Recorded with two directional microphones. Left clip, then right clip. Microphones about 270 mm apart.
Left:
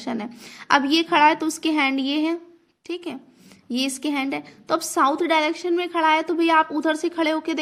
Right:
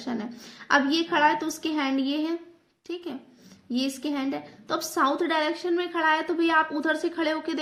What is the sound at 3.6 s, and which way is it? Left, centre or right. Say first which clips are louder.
A woman's voice: left 4 dB; left.